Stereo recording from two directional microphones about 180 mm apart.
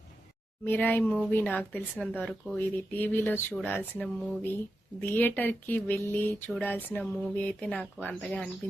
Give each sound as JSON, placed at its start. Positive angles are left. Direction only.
{"t": 0.6, "sound": "speech", "side_deg": 10}